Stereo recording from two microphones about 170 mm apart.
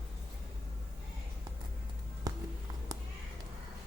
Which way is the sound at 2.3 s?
20° right (ahead or behind).